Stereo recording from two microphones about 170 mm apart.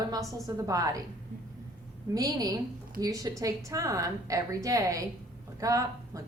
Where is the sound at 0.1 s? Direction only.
20° right (ahead or behind).